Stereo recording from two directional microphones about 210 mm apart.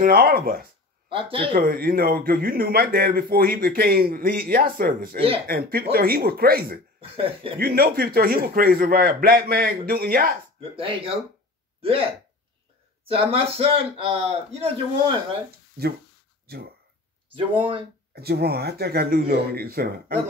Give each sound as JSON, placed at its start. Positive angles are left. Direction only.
{"t": 0.0, "sound": "a man's voice", "side_deg": -45}
{"t": 1.0, "sound": "speech", "side_deg": -25}
{"t": 1.5, "sound": "a man's voice", "side_deg": -40}
{"t": 7.0, "sound": "a man's voice", "side_deg": -25}
{"t": 7.5, "sound": "a man's voice", "side_deg": -45}
{"t": 10.6, "sound": "a man's voice", "side_deg": -25}
{"t": 16.5, "sound": "speech", "side_deg": -50}
{"t": 17.6, "sound": "a man's voice", "side_deg": -25}
{"t": 18.1, "sound": "a man's voice", "side_deg": -50}